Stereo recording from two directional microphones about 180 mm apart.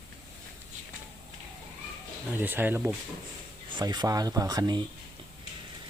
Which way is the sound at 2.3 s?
10° right (ahead or behind).